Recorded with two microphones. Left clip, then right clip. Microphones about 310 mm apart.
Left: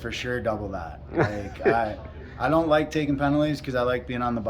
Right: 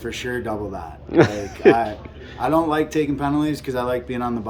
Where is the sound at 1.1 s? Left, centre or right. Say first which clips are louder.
Right 9 dB; right.